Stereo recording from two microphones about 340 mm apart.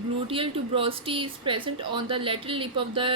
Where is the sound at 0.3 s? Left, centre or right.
Centre.